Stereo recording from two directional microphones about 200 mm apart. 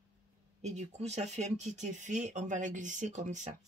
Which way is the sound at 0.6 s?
35° right (ahead or behind).